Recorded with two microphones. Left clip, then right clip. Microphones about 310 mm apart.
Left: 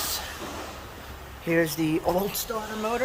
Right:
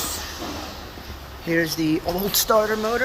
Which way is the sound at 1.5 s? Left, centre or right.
Centre.